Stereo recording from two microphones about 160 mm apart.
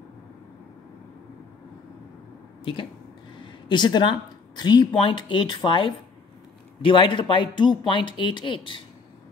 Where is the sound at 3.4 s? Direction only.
30° left (ahead or behind).